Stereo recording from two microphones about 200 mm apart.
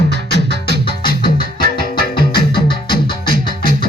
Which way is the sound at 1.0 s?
45° left (ahead or behind).